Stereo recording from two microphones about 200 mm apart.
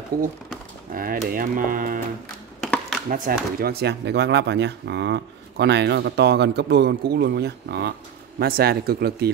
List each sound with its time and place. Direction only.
0.1 s speech: 45° right (ahead or behind)
2.6 s a sound: centre (ahead or behind)
3.1 s speech: 45° right (ahead or behind)